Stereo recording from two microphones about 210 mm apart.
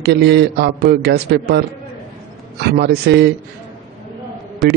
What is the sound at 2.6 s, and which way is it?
Speech, 50° right (ahead or behind).